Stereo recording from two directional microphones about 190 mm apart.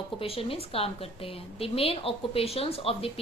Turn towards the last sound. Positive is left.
turn(degrees=30)  # may be behind; listen again after turning